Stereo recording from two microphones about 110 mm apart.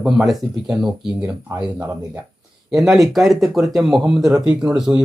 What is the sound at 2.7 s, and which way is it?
Speech, 5° right (ahead or behind).